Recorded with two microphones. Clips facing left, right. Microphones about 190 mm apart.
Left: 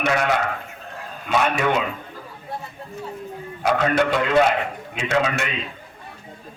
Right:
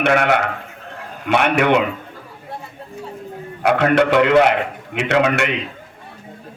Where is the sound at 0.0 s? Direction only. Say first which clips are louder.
Right 5 dB; 60° right (ahead or behind).